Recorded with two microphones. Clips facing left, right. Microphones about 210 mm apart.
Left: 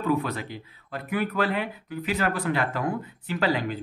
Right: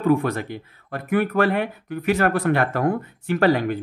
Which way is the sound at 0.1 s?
50° right (ahead or behind).